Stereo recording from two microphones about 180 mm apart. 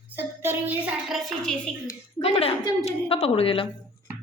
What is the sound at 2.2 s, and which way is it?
Speech, 35° left (ahead or behind).